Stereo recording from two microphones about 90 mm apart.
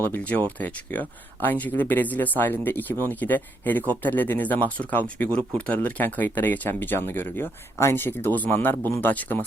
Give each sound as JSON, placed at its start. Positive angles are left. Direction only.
{"t": 0.0, "sound": "speech", "side_deg": 20}